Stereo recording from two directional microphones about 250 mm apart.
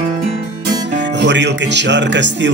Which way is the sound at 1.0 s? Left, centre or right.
Right.